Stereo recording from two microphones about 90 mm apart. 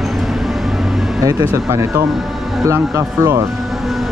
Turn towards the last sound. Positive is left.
turn(degrees=-35)  # may be behind; listen again after turning